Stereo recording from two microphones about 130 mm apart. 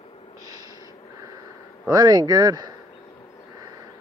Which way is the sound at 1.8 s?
30° right (ahead or behind).